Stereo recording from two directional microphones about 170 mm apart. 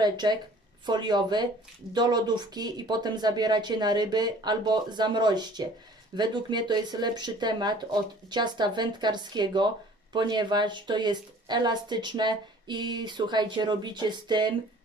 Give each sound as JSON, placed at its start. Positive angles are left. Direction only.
{"t": 0.0, "sound": "speech", "side_deg": -25}